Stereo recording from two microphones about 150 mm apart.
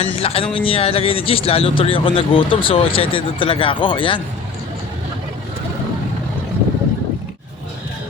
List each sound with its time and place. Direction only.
0.0 s speech: 40° left (ahead or behind)